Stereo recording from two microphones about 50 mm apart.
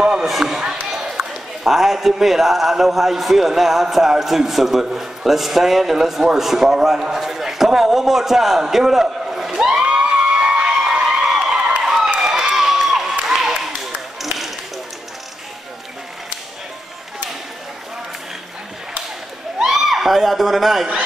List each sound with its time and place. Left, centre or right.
0.2 s speech: centre
0.6 s a sound: centre
1.7 s a man's voice: centre
9.7 s cheering: centre
11.8 s a sound: centre
19.6 s a man's voice: centre